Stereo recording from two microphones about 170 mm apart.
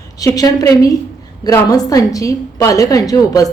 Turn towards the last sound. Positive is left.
turn(degrees=20)  # may be behind; listen again after turning